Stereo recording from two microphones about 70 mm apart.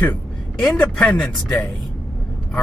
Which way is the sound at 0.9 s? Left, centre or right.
Centre.